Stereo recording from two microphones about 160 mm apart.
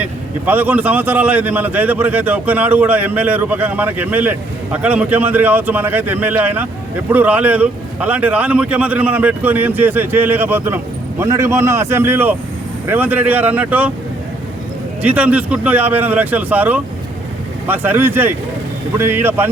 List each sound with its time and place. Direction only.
0.0 s a man's voice: 10° right (ahead or behind)
15.0 s a man's voice: 10° right (ahead or behind)